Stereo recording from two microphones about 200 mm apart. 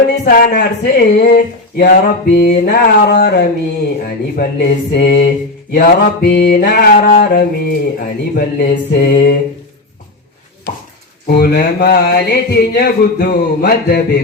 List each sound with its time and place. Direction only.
0.3 s mantra: 50° left (ahead or behind)
11.3 s mantra: 50° left (ahead or behind)